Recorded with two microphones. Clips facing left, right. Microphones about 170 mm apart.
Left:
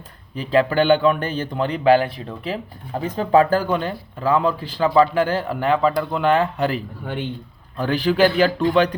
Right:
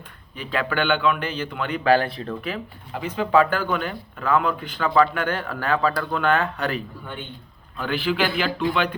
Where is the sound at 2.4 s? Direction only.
35° left (ahead or behind).